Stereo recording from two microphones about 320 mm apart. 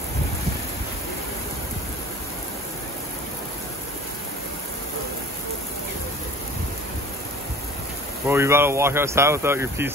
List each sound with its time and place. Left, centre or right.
8.3 s speech: centre